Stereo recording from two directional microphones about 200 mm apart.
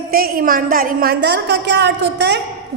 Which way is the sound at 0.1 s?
45° right (ahead or behind).